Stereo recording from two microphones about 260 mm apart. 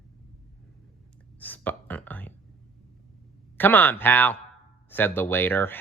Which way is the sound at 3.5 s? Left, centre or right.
Centre.